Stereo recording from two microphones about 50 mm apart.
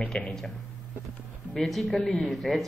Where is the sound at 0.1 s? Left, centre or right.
Centre.